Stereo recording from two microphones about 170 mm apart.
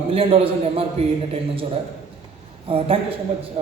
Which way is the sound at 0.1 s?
35° right (ahead or behind).